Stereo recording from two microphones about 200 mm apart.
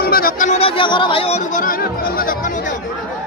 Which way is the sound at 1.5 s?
45° left (ahead or behind).